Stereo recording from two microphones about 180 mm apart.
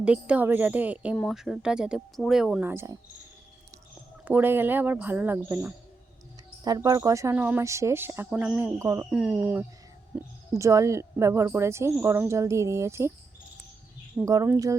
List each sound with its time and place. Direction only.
0.0 s speech: 5° right (ahead or behind)
1.1 s speech: centre (ahead or behind); by 3.0 s 15° right (ahead or behind)
4.3 s speech: 10° right (ahead or behind)
14.3 s speech: 20° right (ahead or behind)